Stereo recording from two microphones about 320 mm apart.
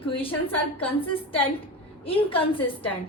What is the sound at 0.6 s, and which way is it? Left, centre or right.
Speech, centre.